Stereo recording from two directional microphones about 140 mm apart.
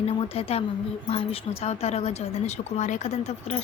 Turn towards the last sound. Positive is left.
turn(degrees=55)  # may be behind; listen again after turning